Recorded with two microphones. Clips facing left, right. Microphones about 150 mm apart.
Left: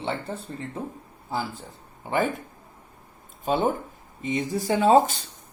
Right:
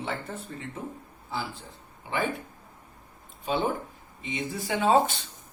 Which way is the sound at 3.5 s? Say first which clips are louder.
Left 4 dB; 45° left (ahead or behind).